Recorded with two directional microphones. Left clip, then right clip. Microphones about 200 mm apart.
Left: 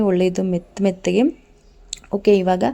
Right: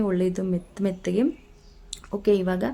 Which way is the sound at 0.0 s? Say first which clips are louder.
Left 7 dB; 25° left (ahead or behind).